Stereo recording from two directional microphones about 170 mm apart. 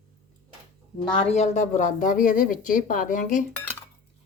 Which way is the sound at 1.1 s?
40° left (ahead or behind).